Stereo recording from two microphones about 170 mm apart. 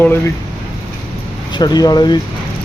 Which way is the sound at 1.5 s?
25° left (ahead or behind).